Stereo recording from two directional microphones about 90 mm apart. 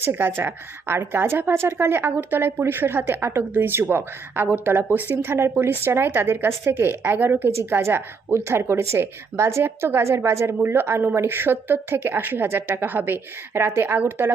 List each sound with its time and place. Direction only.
0.0 s a woman's voice: 25° right (ahead or behind)